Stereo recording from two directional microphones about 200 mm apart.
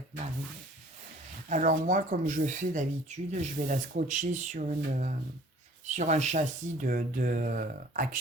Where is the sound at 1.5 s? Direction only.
40° right (ahead or behind).